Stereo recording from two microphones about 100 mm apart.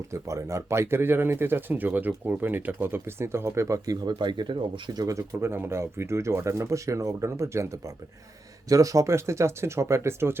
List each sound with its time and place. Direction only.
0.1 s speech: 30° right (ahead or behind)
4.2 s speech: 50° right (ahead or behind)
5.0 s speech: 25° right (ahead or behind)